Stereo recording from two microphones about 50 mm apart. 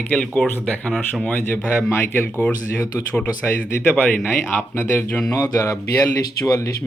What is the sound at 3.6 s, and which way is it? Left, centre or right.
Speech, left.